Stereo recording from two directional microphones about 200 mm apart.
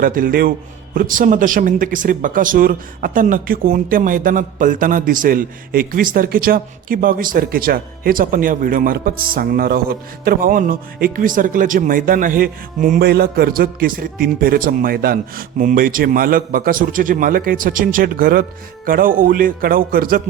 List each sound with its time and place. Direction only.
0.0 s speech: 45° right (ahead or behind)